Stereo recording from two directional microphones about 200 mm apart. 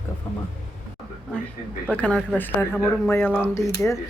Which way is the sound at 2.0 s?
5° left (ahead or behind).